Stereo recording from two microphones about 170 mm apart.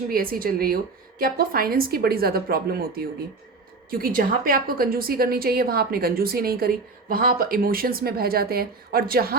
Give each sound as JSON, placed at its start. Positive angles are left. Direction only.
{"t": 0.1, "sound": "a woman's voice", "side_deg": -60}